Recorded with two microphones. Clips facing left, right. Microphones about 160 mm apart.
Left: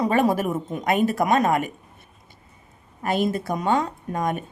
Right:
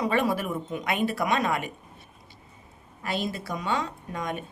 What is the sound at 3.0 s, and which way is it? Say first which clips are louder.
Speech: left 7 dB; 50° left (ahead or behind).